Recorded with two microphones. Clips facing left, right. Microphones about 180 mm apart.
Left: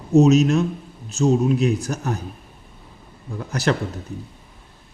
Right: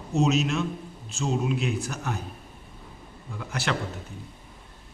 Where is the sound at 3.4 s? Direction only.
40° left (ahead or behind).